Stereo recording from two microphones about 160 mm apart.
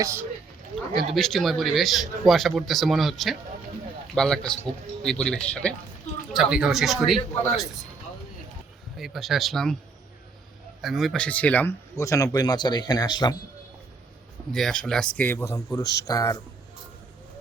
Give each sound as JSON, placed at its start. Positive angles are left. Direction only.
{"t": 0.0, "sound": "speech", "side_deg": -15}
{"t": 1.1, "sound": "a man's voice", "side_deg": 0}
{"t": 9.0, "sound": "a man's voice", "side_deg": 0}
{"t": 10.8, "sound": "speech", "side_deg": 0}
{"t": 14.5, "sound": "speech", "side_deg": 5}